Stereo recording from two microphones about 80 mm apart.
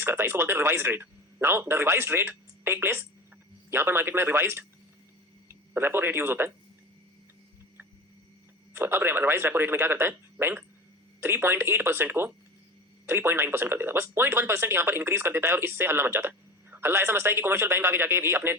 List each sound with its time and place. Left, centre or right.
0.0 s speech: right
5.7 s speech: right
8.7 s speech: right
13.1 s speech: right